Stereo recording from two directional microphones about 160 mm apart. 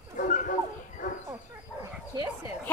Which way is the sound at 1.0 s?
55° left (ahead or behind).